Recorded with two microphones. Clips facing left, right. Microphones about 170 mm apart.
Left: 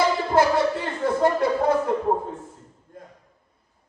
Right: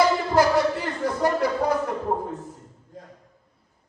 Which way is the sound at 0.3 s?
25° left (ahead or behind).